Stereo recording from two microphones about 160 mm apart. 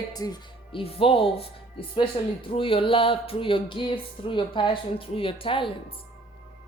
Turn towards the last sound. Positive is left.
turn(degrees=35)  # may be behind; listen again after turning